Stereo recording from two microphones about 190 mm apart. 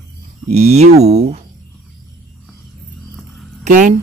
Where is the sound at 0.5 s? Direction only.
35° right (ahead or behind).